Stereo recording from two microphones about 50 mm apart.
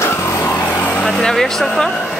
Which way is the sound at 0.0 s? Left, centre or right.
Left.